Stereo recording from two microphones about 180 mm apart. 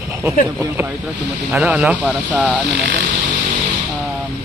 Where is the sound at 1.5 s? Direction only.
10° right (ahead or behind).